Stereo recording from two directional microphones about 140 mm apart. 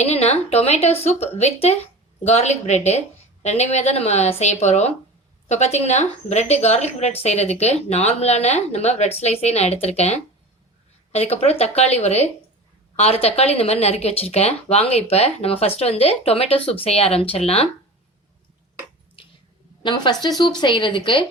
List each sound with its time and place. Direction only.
0.0 s speech: 50° left (ahead or behind)
19.8 s a woman's voice: 30° left (ahead or behind)